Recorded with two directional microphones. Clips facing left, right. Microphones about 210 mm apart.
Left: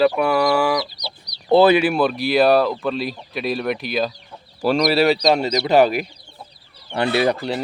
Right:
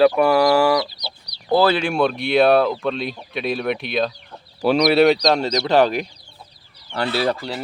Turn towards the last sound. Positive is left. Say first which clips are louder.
# left 3 dB
turn(degrees=20)  # may be behind; listen again after turning